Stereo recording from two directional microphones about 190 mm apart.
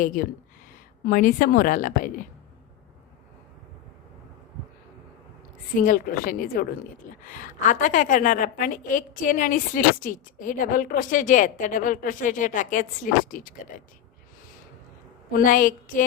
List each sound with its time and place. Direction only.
0.0 s a woman's voice: 45° left (ahead or behind)
5.8 s a woman's voice: 45° left (ahead or behind)
15.3 s a woman's voice: 45° left (ahead or behind)